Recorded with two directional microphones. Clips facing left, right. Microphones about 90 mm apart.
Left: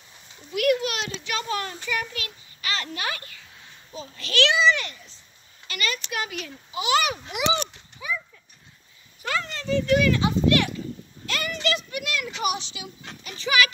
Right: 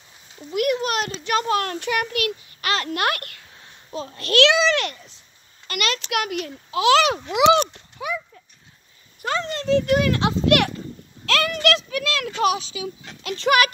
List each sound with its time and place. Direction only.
0.8 s a child's voice: 40° right (ahead or behind)
1.5 s a child's voice: 70° right (ahead or behind)
4.1 s a child's voice: 55° right (ahead or behind); by 4.9 s 90° right
5.7 s a child's voice: 75° right (ahead or behind)
6.7 s speech: 90° right
7.7 s clip-clop: 65° right (ahead or behind)
9.2 s a child's voice: 35° right (ahead or behind)
9.5 s speech: 60° right (ahead or behind)
10.2 s a child's voice: 75° right (ahead or behind)
11.2 s a sound: 90° right
13.2 s speech: 75° right (ahead or behind); by 13.7 s 60° right (ahead or behind)